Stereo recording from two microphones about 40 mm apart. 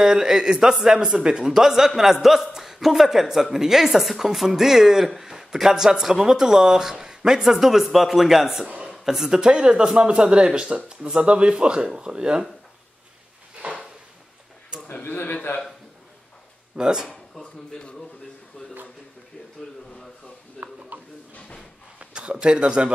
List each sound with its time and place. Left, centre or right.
0.0 s speech: centre
15.0 s a man's voice: left
16.7 s speech: right
17.1 s speech: left
20.6 s a sound: centre
21.4 s a sound: left
21.9 s speech: right